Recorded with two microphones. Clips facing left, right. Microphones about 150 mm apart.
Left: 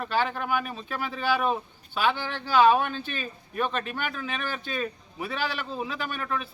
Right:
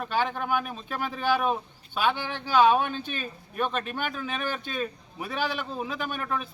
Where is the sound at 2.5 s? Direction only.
5° left (ahead or behind).